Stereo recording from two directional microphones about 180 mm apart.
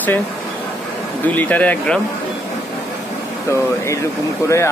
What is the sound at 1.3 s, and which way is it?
Speech, 10° left (ahead or behind).